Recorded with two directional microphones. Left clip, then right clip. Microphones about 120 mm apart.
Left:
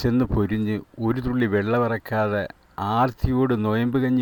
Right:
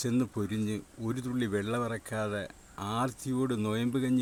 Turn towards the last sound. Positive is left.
turn(degrees=50)  # may be behind; listen again after turning